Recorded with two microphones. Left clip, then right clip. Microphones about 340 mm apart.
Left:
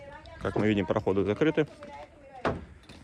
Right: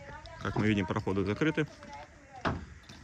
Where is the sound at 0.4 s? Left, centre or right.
Centre.